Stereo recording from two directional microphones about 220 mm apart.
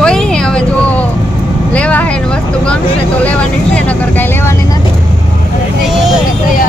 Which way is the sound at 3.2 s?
10° left (ahead or behind).